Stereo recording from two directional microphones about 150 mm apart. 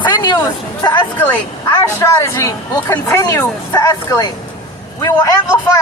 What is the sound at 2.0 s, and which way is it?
Speech, 20° left (ahead or behind).